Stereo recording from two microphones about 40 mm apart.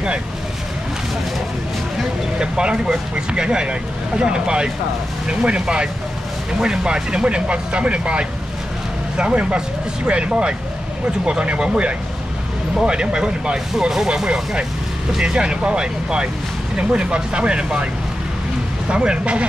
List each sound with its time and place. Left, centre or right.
2.3 s speech: right
18.9 s speech: right